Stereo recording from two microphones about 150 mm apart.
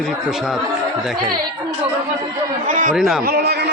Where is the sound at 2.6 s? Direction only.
60° right (ahead or behind).